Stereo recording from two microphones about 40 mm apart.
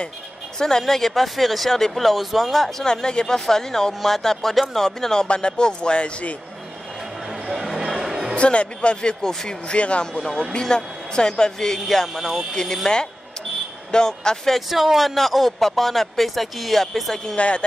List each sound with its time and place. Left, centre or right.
0.6 s speech: centre
2.8 s speech: centre
7.5 s music: centre
8.4 s a man's voice: left
9.2 s speech: centre
9.5 s a man's voice: left
10.5 s a man's voice: centre
12.1 s speech: centre
12.5 s speech: centre
14.7 s speech: centre
17.4 s a man's voice: left